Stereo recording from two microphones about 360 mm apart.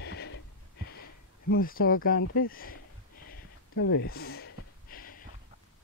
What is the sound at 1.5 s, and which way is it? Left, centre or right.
Speech, left.